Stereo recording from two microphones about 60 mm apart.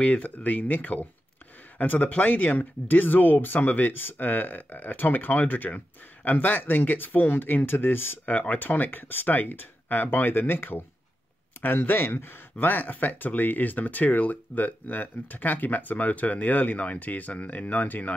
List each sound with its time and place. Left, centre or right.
0.0 s speech: left